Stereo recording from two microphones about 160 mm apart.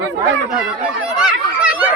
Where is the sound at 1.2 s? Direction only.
5° right (ahead or behind).